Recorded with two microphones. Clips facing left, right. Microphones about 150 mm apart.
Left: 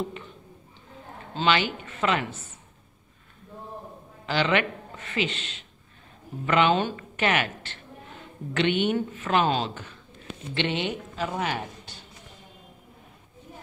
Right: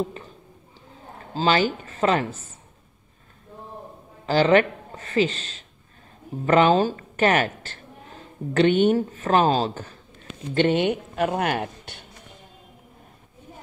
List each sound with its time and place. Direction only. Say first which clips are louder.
1.3 s speech: right 4 dB; 40° right (ahead or behind)
4.3 s speech: right 7 dB; 40° right (ahead or behind); by 12.1 s 60° right (ahead or behind)